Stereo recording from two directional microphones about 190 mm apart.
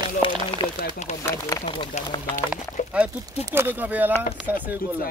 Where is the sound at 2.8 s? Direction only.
40° left (ahead or behind).